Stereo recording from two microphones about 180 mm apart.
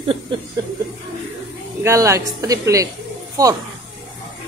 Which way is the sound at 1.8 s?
15° right (ahead or behind).